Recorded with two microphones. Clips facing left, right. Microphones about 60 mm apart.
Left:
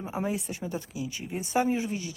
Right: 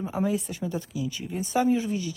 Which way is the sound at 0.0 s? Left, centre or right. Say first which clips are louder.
Right 4 dB; centre.